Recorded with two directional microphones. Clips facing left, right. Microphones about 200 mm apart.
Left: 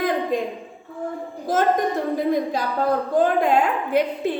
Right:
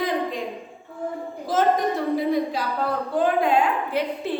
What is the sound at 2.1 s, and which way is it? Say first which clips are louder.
A woman's voice: left 1 dB; 45° left (ahead or behind).